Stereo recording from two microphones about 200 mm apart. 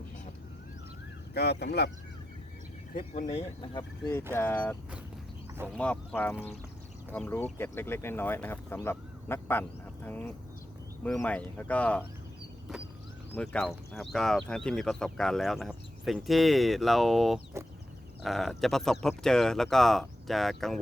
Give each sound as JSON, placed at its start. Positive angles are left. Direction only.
{"t": 1.3, "sound": "speech", "side_deg": 55}
{"t": 3.0, "sound": "speech", "side_deg": 35}
{"t": 3.2, "sound": "speech", "side_deg": 20}
{"t": 4.4, "sound": "speech", "side_deg": 10}
{"t": 13.3, "sound": "speech", "side_deg": 5}